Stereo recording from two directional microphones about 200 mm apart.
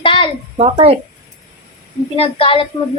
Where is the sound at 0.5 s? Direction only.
30° right (ahead or behind).